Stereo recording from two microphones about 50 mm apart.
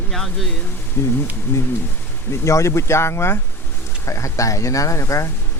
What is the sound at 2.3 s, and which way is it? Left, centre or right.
Speech, left.